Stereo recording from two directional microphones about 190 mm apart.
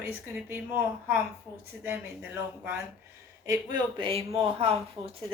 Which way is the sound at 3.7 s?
30° right (ahead or behind).